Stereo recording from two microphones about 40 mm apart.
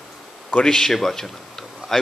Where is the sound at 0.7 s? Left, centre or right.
Centre.